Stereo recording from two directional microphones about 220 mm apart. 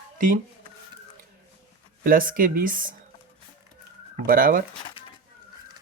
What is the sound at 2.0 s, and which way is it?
Speech, 40° right (ahead or behind).